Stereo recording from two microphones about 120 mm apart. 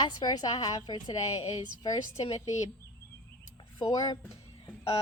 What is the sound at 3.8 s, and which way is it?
Speech, 35° left (ahead or behind).